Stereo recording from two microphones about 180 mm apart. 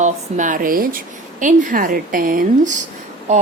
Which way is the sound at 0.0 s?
45° right (ahead or behind).